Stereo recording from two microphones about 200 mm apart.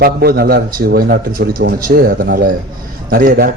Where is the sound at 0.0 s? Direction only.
50° right (ahead or behind).